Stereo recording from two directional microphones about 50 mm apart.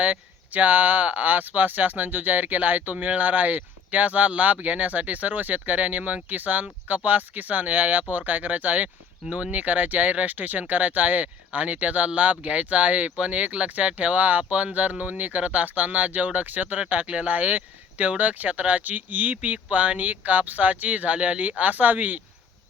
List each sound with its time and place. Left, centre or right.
0.0 s speech: right